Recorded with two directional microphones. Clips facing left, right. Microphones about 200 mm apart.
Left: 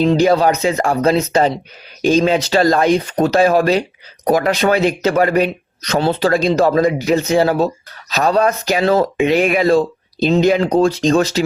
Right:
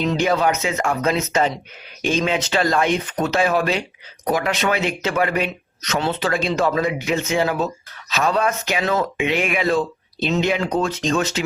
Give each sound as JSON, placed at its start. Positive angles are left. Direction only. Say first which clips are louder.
{"t": 0.0, "sound": "speech", "louder": "left 6 dB", "side_deg": 35}